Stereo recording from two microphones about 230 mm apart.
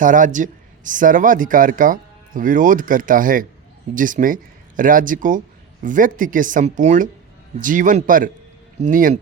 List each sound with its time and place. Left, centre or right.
0.0 s speech: right